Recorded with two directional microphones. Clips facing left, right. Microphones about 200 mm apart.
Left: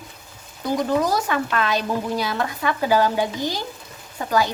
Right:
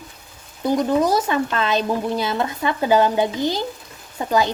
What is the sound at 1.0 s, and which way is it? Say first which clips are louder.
Speech: right 3 dB; 20° right (ahead or behind).